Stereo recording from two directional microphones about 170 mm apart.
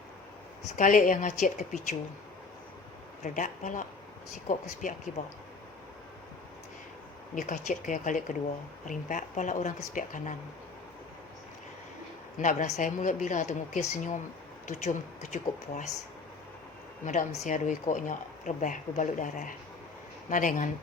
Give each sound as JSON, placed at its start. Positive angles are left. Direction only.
{"t": 0.8, "sound": "speech", "side_deg": 50}
{"t": 3.2, "sound": "speech", "side_deg": 50}
{"t": 7.3, "sound": "speech", "side_deg": 45}
{"t": 12.4, "sound": "speech", "side_deg": 50}
{"t": 17.1, "sound": "speech", "side_deg": 45}